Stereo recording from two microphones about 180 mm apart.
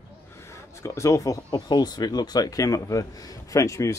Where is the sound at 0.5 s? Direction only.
15° left (ahead or behind).